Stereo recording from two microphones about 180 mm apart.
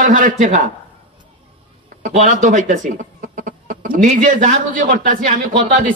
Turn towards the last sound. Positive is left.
turn(degrees=-45)  # may be behind; listen again after turning